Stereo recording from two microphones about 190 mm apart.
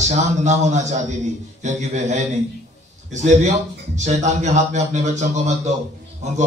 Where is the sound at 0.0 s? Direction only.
40° right (ahead or behind).